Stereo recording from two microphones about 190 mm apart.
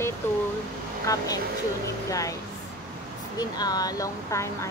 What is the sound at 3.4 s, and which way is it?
Speech, 20° left (ahead or behind).